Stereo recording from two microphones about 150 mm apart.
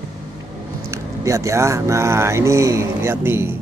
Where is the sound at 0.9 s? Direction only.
20° right (ahead or behind).